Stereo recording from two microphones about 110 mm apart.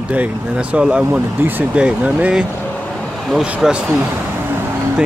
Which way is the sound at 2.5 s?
15° left (ahead or behind).